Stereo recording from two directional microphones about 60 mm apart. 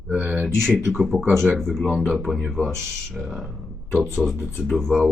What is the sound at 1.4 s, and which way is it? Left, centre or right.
Speech, centre.